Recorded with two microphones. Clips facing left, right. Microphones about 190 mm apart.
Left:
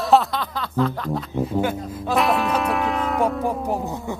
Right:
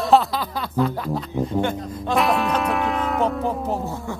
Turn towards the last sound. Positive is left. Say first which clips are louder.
# left 1 dB
turn(degrees=15)  # may be behind; listen again after turning